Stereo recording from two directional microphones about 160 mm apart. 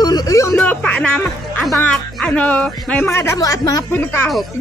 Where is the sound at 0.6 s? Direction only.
5° left (ahead or behind).